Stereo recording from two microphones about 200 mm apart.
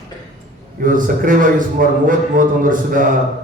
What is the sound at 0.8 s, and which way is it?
A man's voice, 40° right (ahead or behind).